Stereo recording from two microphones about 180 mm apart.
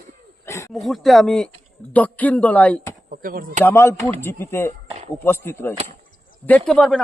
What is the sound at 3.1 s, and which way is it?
Speech, 50° right (ahead or behind).